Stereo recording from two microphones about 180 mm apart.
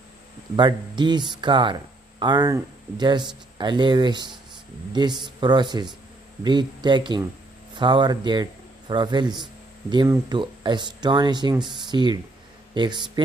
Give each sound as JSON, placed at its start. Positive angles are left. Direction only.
{"t": 0.6, "sound": "speech", "side_deg": -25}